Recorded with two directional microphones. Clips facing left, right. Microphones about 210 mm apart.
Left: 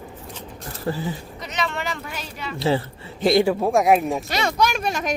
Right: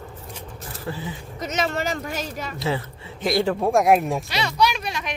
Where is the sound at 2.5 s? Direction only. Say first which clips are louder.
Left 6 dB; 30° left (ahead or behind).